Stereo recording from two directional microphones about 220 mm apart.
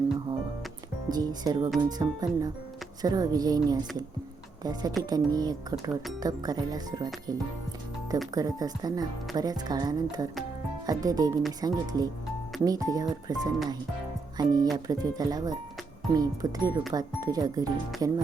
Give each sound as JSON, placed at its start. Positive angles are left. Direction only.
{"t": 1.0, "sound": "speech", "side_deg": -15}
{"t": 8.4, "sound": "speech", "side_deg": -15}